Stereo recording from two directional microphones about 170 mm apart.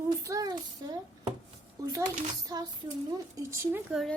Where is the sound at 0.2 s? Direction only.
20° right (ahead or behind).